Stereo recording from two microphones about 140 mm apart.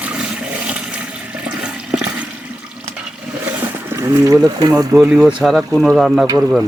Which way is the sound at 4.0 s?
25° right (ahead or behind).